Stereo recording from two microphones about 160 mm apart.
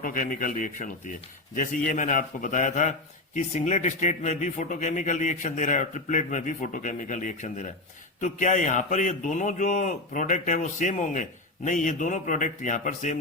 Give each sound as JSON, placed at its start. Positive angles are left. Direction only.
{"t": 0.0, "sound": "a man's voice", "side_deg": 55}